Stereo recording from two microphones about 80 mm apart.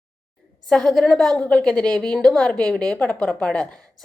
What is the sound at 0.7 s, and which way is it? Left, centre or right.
A woman's voice, centre.